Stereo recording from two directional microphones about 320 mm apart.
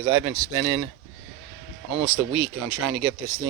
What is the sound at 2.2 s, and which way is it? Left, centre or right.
Speech, centre.